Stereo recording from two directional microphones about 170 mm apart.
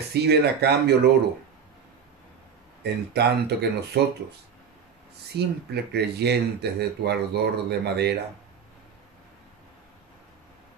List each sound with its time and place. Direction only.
0.1 s speech: 75° right (ahead or behind)
2.8 s speech: 75° right (ahead or behind)
5.3 s speech: 75° right (ahead or behind)